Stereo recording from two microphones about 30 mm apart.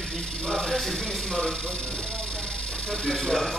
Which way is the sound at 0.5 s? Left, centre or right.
Centre.